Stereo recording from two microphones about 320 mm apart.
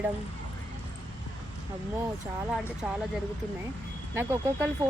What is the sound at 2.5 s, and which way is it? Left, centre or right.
Speech, centre.